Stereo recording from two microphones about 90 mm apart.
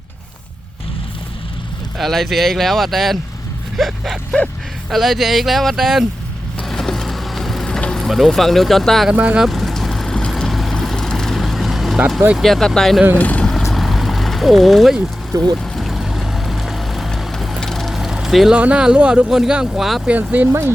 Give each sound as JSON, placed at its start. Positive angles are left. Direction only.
{"t": 2.0, "sound": "speech", "side_deg": 0}
{"t": 6.6, "sound": "vehicle", "side_deg": 5}
{"t": 9.0, "sound": "speech", "side_deg": -15}
{"t": 9.4, "sound": "vehicle", "side_deg": 0}
{"t": 12.4, "sound": "speech", "side_deg": 5}
{"t": 13.1, "sound": "speech", "side_deg": 15}
{"t": 13.5, "sound": "vehicle", "side_deg": 0}
{"t": 18.5, "sound": "speech", "side_deg": -10}
{"t": 20.1, "sound": "speech", "side_deg": -20}